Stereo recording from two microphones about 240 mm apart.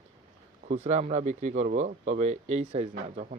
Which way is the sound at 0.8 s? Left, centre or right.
Right.